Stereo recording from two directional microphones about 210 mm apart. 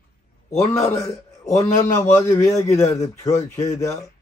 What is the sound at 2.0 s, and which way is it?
Speech, 15° left (ahead or behind).